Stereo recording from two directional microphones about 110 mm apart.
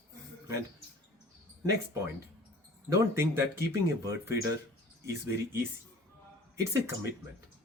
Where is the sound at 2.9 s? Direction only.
25° right (ahead or behind).